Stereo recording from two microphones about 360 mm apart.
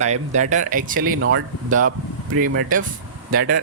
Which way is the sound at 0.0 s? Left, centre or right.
Centre.